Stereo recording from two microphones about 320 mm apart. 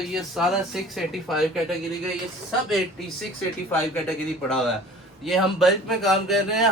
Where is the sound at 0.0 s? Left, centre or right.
Centre.